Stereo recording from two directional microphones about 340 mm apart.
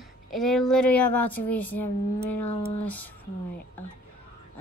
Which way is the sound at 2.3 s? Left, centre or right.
Left.